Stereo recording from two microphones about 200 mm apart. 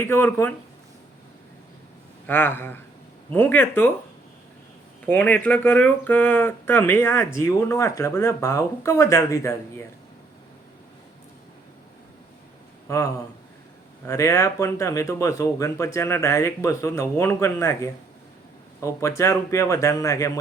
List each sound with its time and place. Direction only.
0.0 s speech: 10° left (ahead or behind)
2.2 s speech: 10° left (ahead or behind)
5.0 s speech: 10° left (ahead or behind)
12.9 s speech: 15° left (ahead or behind)
14.1 s speech: 15° left (ahead or behind)